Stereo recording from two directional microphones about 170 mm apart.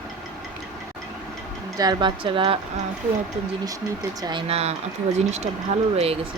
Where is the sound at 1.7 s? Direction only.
25° right (ahead or behind).